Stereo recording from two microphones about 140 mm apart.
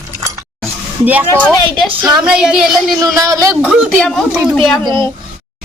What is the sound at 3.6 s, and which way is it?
A woman's voice, 5° right (ahead or behind).